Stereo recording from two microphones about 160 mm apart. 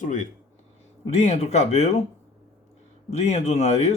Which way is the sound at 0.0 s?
50° left (ahead or behind).